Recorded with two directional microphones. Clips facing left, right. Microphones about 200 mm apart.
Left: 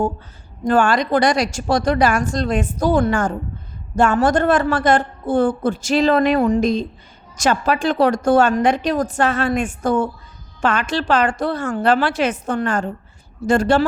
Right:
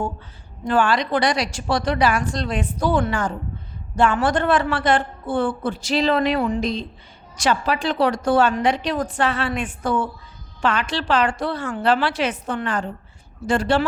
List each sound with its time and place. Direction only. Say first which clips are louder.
0.6 s a woman's voice: left 3 dB; 45° left (ahead or behind)